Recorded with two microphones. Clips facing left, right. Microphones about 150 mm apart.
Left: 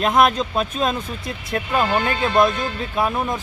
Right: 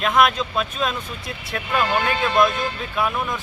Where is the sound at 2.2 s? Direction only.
35° left (ahead or behind).